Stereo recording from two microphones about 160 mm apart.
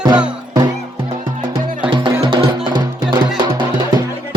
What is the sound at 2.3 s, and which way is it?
Music, 30° right (ahead or behind).